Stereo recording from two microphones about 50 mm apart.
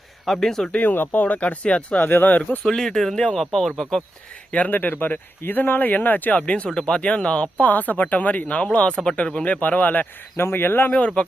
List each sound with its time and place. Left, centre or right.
0.3 s speech: centre
0.7 s speech: left
2.0 s speech: left
2.6 s speech: centre
4.7 s speech: left
6.7 s speech: centre
7.6 s speech: left
10.3 s speech: left
10.9 s speech: left